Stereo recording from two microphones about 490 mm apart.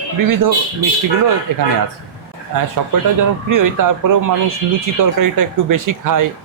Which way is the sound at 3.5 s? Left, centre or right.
Right.